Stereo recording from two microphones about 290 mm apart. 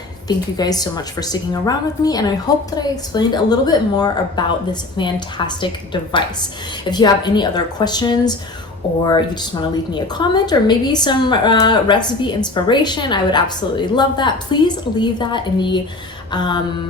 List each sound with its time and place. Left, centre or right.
0.3 s a woman's voice: centre